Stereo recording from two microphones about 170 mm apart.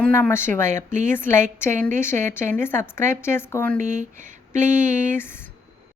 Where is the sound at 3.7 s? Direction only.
45° right (ahead or behind).